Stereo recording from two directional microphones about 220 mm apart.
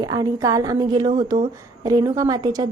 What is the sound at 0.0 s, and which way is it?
A woman's voice, 15° right (ahead or behind).